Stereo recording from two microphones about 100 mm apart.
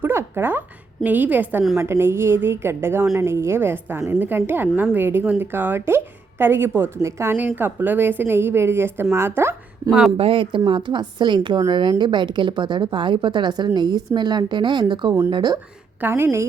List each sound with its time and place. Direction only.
0.0 s a sound: 25° right (ahead or behind)
1.0 s a woman's voice: 15° right (ahead or behind)
10.2 s a woman's voice: 60° right (ahead or behind); by 15.5 s 45° right (ahead or behind)
16.0 s a woman's voice: 25° right (ahead or behind)